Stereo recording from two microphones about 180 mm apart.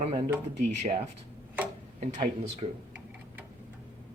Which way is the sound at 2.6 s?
30° right (ahead or behind).